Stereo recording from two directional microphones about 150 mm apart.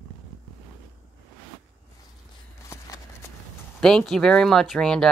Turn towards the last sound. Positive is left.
turn(degrees=5)  # may be behind; listen again after turning